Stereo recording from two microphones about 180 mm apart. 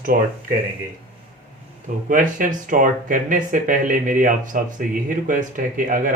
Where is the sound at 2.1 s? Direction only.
45° right (ahead or behind).